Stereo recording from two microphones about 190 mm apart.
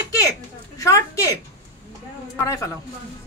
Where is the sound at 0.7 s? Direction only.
15° left (ahead or behind).